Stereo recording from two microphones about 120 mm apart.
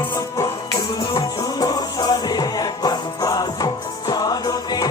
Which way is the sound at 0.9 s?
35° left (ahead or behind).